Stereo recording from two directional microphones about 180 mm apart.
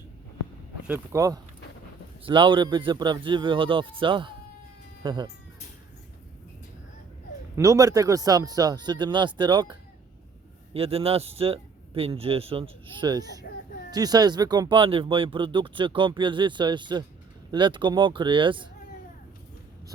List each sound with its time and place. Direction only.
0.9 s speech: 15° right (ahead or behind)
2.2 s speech: 30° right (ahead or behind)
7.5 s speech: 15° right (ahead or behind)
10.8 s speech: 35° right (ahead or behind)